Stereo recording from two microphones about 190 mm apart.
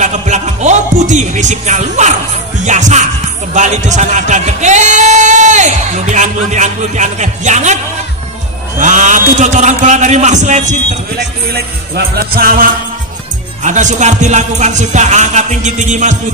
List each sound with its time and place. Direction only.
0.0 s music: 40° right (ahead or behind)
3.5 s speech: 40° right (ahead or behind)
11.5 s music: 50° right (ahead or behind)
13.7 s speech: 40° right (ahead or behind)